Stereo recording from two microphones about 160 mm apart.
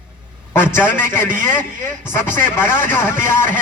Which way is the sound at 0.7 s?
15° left (ahead or behind).